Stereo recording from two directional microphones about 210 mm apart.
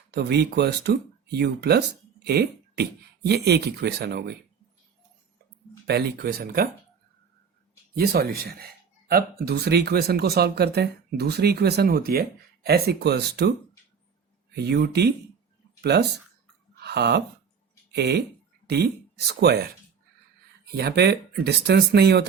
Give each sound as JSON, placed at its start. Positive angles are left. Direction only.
{"t": 0.1, "sound": "speech", "side_deg": -50}
{"t": 5.9, "sound": "speech", "side_deg": -50}
{"t": 7.9, "sound": "speech", "side_deg": -45}
{"t": 14.5, "sound": "speech", "side_deg": -50}
{"t": 16.8, "sound": "a sound", "side_deg": -50}
{"t": 17.9, "sound": "speech", "side_deg": -50}
{"t": 20.7, "sound": "speech", "side_deg": -50}